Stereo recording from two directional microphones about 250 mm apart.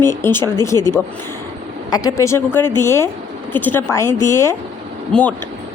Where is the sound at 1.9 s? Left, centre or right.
Centre.